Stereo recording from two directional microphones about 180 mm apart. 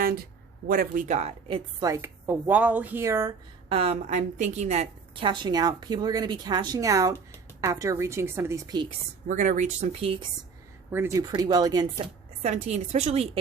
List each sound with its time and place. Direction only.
0.7 s speech: 50° right (ahead or behind)
1.5 s speech: 25° right (ahead or behind)
3.7 s a woman's voice: 30° right (ahead or behind)
9.2 s speech: 45° right (ahead or behind)
10.9 s speech: 10° right (ahead or behind)
11.2 s a woman's voice: 25° right (ahead or behind)
12.4 s a woman's voice: 40° right (ahead or behind)